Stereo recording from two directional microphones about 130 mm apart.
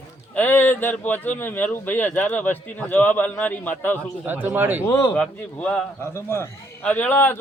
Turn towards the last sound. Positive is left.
turn(degrees=15)  # may be behind; listen again after turning